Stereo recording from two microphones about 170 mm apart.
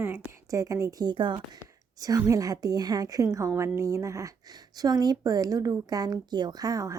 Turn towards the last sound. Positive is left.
turn(degrees=-20)  # may be behind; listen again after turning